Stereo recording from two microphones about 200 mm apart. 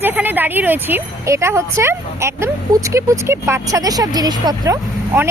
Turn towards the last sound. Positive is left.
turn(degrees=-15)  # may be behind; listen again after turning